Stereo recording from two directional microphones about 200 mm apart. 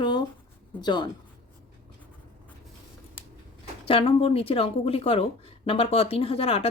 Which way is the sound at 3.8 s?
30° left (ahead or behind).